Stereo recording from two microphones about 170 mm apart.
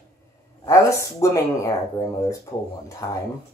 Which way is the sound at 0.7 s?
15° left (ahead or behind).